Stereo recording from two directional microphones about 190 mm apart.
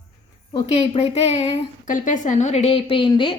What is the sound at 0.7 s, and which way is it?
A woman's voice, 35° left (ahead or behind).